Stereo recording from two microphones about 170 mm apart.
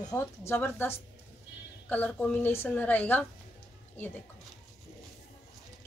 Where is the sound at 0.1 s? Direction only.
15° left (ahead or behind).